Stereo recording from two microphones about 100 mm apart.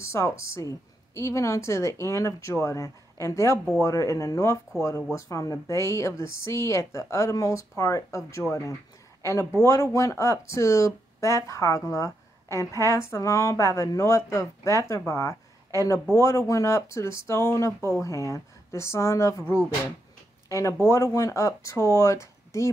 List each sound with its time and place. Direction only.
0.0 s speech: 30° left (ahead or behind)
20.4 s speech: 30° left (ahead or behind)